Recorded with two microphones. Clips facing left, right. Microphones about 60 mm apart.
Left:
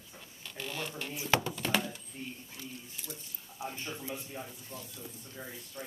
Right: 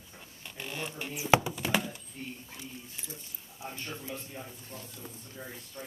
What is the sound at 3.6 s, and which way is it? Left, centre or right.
Speech, left.